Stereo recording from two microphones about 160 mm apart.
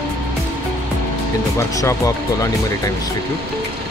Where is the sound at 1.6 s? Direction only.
20° left (ahead or behind).